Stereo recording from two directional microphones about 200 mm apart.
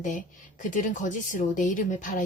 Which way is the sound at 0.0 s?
40° left (ahead or behind).